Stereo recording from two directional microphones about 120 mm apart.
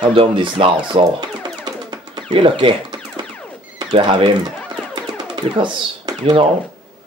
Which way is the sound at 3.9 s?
50° right (ahead or behind).